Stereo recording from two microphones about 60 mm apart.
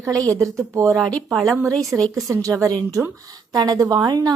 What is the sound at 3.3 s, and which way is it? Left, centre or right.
A woman's voice, right.